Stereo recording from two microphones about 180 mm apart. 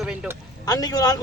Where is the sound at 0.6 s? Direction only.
20° left (ahead or behind).